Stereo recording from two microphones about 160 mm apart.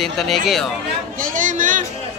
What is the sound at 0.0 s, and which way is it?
Speech, centre (ahead or behind).